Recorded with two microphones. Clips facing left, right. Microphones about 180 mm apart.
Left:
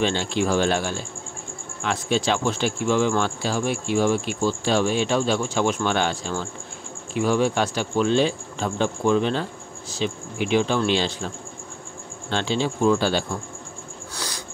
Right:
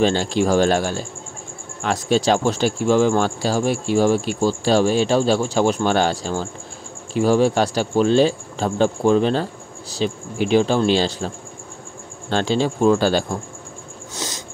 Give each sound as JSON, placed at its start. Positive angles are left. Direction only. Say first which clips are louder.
{"t": 0.0, "sound": "speech", "louder": "right 5 dB", "side_deg": -40}
{"t": 12.3, "sound": "speech", "louder": "right 4 dB", "side_deg": -40}
{"t": 14.1, "sound": "a sound", "louder": "right 4 dB", "side_deg": -20}